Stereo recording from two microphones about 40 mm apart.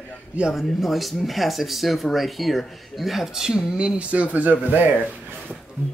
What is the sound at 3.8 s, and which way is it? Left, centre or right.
Speech, right.